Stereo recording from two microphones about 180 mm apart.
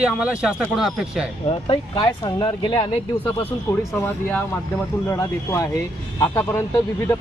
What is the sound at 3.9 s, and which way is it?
Speech, 10° left (ahead or behind).